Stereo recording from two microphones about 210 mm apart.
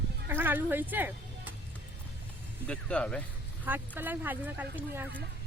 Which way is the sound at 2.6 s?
5° left (ahead or behind).